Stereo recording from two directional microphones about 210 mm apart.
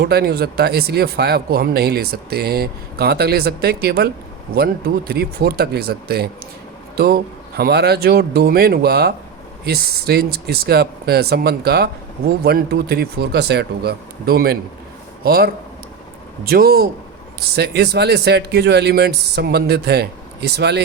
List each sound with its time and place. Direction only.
0.0 s speech: 50° right (ahead or behind)